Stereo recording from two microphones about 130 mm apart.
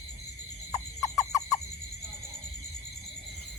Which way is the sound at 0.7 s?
25° left (ahead or behind).